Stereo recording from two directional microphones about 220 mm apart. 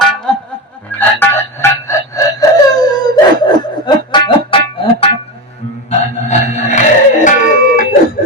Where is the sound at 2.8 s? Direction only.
20° left (ahead or behind).